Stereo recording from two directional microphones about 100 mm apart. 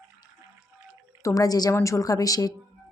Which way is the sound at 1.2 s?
35° left (ahead or behind).